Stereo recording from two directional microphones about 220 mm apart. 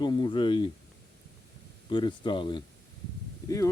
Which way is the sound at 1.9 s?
20° left (ahead or behind).